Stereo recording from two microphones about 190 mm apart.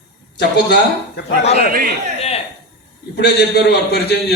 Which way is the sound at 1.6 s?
50° right (ahead or behind).